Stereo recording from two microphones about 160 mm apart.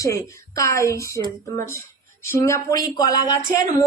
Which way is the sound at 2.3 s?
15° left (ahead or behind).